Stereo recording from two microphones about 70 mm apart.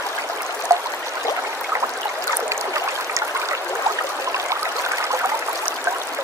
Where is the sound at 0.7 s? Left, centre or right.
Right.